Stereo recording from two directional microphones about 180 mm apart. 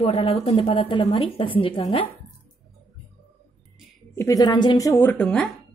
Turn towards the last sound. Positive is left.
turn(degrees=5)  # may be behind; listen again after turning